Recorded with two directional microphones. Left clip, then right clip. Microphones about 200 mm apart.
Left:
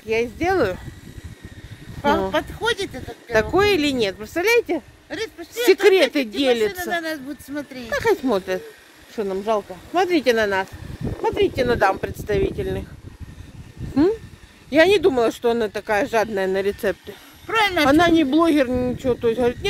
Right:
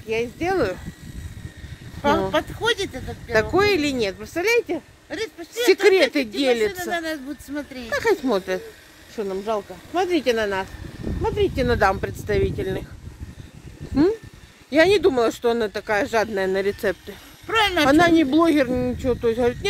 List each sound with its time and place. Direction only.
0.1 s speech: 20° left (ahead or behind)
2.0 s speech: 5° left (ahead or behind); by 4.8 s 20° left (ahead or behind)
5.1 s speech: 5° left (ahead or behind)
9.1 s speech: 20° left (ahead or behind); by 12.8 s 5° left (ahead or behind)
14.7 s speech: 10° left (ahead or behind)